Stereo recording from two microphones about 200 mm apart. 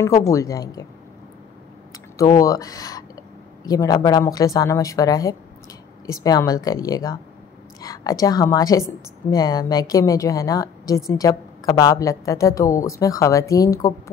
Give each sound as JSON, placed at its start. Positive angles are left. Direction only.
{"t": 0.0, "sound": "a woman's voice", "side_deg": 15}
{"t": 2.1, "sound": "a woman's voice", "side_deg": 15}